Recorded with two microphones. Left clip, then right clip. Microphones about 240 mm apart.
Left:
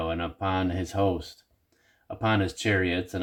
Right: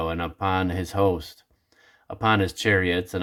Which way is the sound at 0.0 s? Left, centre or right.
Right.